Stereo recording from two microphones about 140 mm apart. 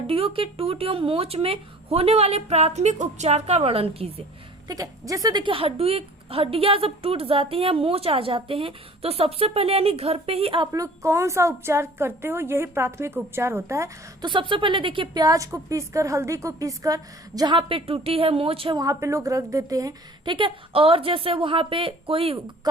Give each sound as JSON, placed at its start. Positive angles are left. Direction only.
{"t": 0.1, "sound": "a woman's voice", "side_deg": -40}
{"t": 4.7, "sound": "a woman's voice", "side_deg": -25}
{"t": 10.7, "sound": "a woman's voice", "side_deg": -20}
{"t": 14.3, "sound": "a woman's voice", "side_deg": -35}
{"t": 18.8, "sound": "a woman's voice", "side_deg": -25}
{"t": 20.3, "sound": "a woman's voice", "side_deg": -40}